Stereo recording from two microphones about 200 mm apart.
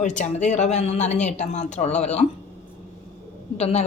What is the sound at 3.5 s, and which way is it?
Speech, 30° left (ahead or behind).